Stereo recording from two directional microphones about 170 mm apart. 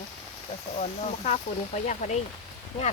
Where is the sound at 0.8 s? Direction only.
40° left (ahead or behind).